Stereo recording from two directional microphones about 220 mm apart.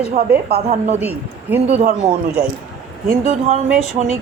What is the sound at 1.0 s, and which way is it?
Speech, 5° right (ahead or behind).